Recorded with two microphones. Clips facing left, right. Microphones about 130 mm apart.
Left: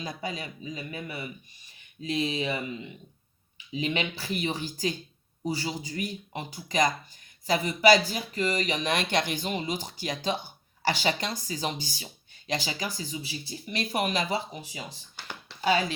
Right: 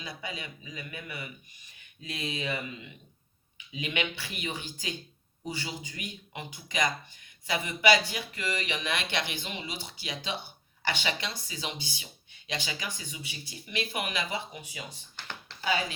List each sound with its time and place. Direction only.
0.0 s speech: 40° left (ahead or behind)
15.1 s a sound: 10° left (ahead or behind)
15.6 s speech: 35° left (ahead or behind)